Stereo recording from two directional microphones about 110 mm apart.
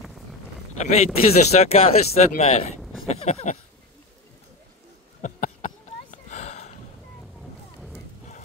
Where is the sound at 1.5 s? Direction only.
90° left.